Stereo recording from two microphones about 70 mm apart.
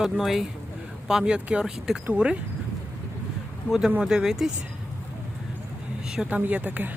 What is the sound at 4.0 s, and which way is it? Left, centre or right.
Speech, centre.